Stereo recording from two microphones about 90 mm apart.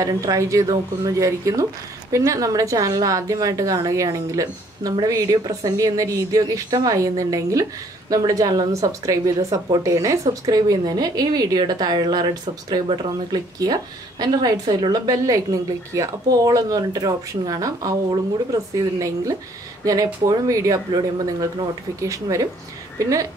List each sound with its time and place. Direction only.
0.0 s a woman's voice: 40° right (ahead or behind)